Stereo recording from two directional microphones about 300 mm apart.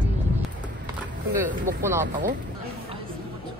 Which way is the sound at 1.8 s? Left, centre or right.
Centre.